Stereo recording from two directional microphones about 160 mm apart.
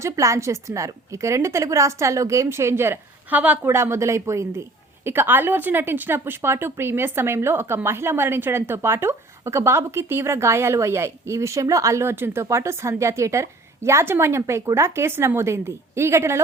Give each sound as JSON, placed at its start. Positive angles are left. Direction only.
{"t": 0.0, "sound": "a woman's voice", "side_deg": -20}